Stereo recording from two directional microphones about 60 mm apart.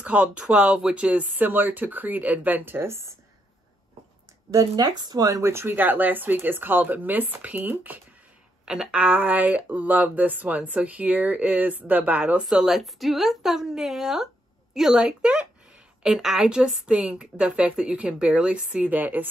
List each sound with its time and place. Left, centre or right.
0.0 s speech: right
1.3 s speech: right
4.5 s speech: right
5.5 s speech: right
8.6 s speech: centre
12.4 s a woman's voice: centre; by 19.2 s right